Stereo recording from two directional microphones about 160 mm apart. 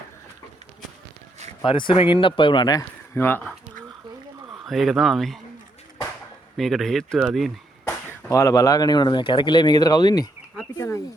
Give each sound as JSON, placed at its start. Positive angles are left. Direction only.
{"t": 1.6, "sound": "speech", "side_deg": 30}
{"t": 3.2, "sound": "speech", "side_deg": 10}
{"t": 4.6, "sound": "speech", "side_deg": 0}
{"t": 6.6, "sound": "speech", "side_deg": 0}
{"t": 8.3, "sound": "speech", "side_deg": 20}
{"t": 10.8, "sound": "a sound", "side_deg": 20}